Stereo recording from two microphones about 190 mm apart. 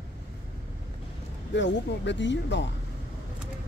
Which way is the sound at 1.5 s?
70° left (ahead or behind).